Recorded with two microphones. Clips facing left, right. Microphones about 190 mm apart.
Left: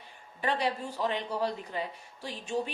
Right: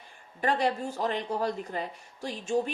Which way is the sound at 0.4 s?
45° right (ahead or behind).